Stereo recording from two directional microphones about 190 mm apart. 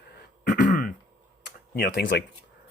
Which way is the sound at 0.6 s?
45° left (ahead or behind).